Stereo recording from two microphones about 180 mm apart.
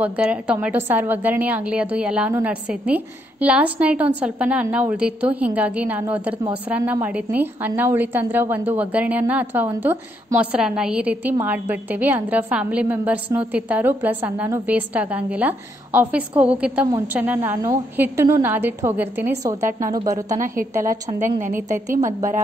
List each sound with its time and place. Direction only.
0.0 s a woman's voice: 5° right (ahead or behind)
20.3 s a woman's voice: 45° right (ahead or behind)
20.7 s a woman's voice: 15° right (ahead or behind)